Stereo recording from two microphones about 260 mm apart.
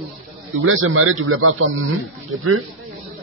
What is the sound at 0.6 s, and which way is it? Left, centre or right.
A man's voice, right.